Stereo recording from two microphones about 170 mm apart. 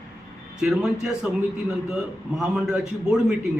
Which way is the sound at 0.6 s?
5° right (ahead or behind).